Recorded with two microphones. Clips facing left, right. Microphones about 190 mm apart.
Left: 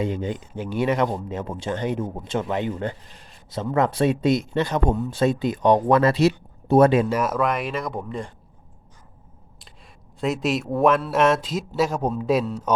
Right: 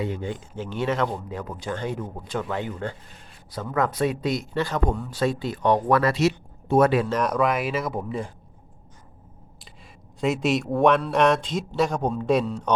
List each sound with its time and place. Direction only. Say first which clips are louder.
0.0 s speech: left 3 dB; 20° left (ahead or behind)
7.1 s speech: even; 5° left (ahead or behind)
10.2 s speech: right 1 dB; centre (ahead or behind)